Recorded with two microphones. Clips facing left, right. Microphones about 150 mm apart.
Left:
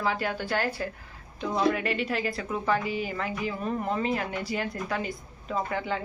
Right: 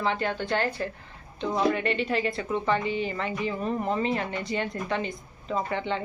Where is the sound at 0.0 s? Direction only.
5° left (ahead or behind).